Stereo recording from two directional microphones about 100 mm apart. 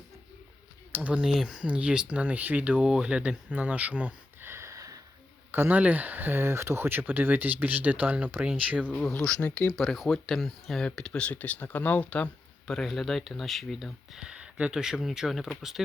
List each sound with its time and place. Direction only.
0.9 s speech: 15° right (ahead or behind); by 4.9 s 30° right (ahead or behind)
5.5 s speech: 20° right (ahead or behind)
9.1 s speech: 10° left (ahead or behind)